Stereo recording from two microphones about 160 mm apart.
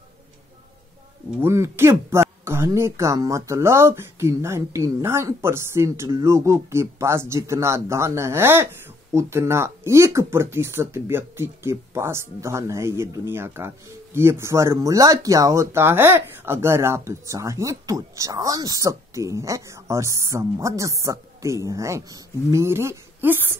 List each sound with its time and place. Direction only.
1.4 s speech: 15° right (ahead or behind)